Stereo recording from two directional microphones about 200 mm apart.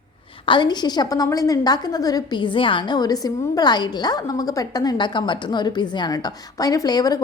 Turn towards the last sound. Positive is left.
turn(degrees=20)  # may be behind; listen again after turning